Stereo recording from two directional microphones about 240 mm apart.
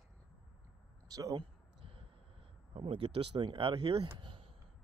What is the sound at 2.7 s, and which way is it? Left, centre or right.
Speech, right.